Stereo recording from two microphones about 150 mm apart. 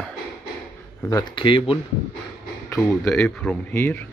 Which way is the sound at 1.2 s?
35° left (ahead or behind).